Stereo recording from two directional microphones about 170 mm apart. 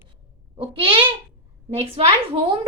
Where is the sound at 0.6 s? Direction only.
30° right (ahead or behind).